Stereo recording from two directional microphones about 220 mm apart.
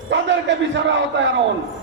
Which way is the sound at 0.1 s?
55° right (ahead or behind).